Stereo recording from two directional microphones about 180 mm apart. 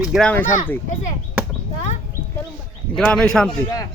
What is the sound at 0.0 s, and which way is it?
Speech, centre (ahead or behind).